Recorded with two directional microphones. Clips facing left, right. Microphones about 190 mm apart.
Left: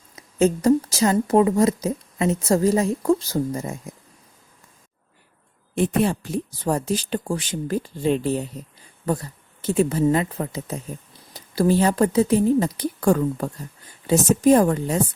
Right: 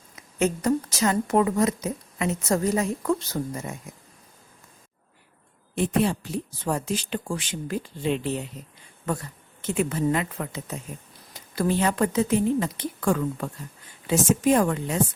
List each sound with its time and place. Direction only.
0.2 s speech: 30° left (ahead or behind)
5.7 s speech: 50° left (ahead or behind)